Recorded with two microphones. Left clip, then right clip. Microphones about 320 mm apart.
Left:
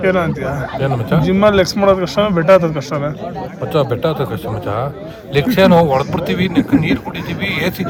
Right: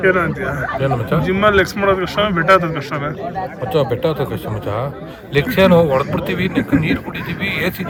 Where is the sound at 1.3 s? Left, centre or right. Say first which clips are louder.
Left 2 dB; right.